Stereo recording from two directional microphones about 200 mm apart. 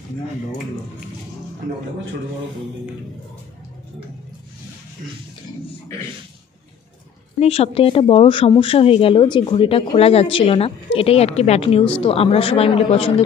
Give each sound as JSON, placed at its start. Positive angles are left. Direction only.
{"t": 7.3, "sound": "speech", "side_deg": 30}